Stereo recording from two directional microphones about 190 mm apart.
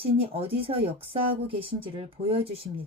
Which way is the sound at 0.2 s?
30° right (ahead or behind).